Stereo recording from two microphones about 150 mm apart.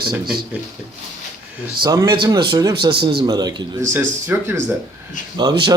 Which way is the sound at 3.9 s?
15° right (ahead or behind).